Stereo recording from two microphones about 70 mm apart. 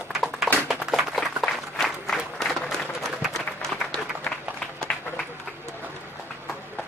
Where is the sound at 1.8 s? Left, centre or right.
Centre.